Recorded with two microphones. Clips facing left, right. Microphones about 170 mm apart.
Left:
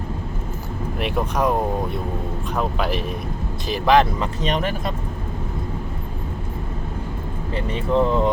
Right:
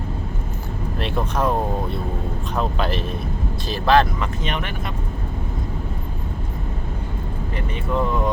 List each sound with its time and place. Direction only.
0.9 s speech: 15° left (ahead or behind)
2.6 s speech: 10° left (ahead or behind)
4.2 s speech: 35° left (ahead or behind)
7.5 s speech: 30° left (ahead or behind)